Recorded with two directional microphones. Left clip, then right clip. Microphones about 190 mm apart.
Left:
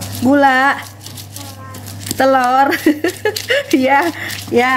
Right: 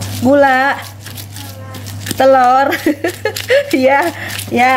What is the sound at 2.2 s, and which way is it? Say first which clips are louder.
Speech: right 3 dB; 10° left (ahead or behind).